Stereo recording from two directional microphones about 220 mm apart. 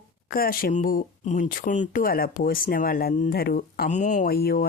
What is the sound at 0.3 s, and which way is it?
Speech, 40° left (ahead or behind).